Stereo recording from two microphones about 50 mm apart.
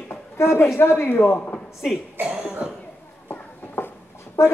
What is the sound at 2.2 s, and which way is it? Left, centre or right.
Cough, right.